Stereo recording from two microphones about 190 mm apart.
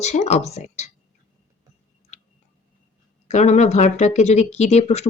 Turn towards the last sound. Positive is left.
turn(degrees=35)  # may be behind; listen again after turning